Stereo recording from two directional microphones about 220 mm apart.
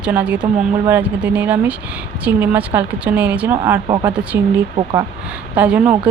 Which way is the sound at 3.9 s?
20° right (ahead or behind).